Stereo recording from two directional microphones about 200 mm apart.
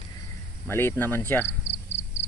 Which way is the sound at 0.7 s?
10° left (ahead or behind).